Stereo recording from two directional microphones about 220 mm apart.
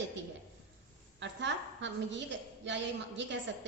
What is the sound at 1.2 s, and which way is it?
A woman's voice, 55° right (ahead or behind).